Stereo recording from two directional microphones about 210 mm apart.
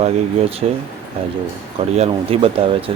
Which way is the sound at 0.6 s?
30° right (ahead or behind).